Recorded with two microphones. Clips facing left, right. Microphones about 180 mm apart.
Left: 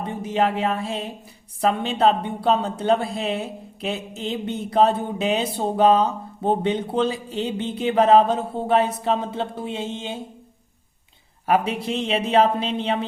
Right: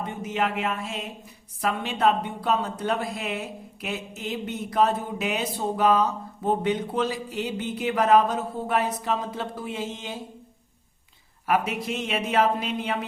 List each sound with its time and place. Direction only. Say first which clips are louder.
0.0 s music: left 5 dB; 35° left (ahead or behind)
1.6 s speech: left 4 dB; 30° left (ahead or behind)
11.4 s speech: left 4 dB; 30° left (ahead or behind)